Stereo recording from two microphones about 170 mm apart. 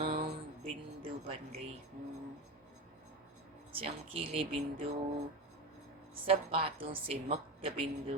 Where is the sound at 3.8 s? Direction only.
35° right (ahead or behind).